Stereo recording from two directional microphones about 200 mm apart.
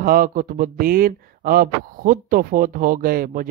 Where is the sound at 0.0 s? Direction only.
45° right (ahead or behind).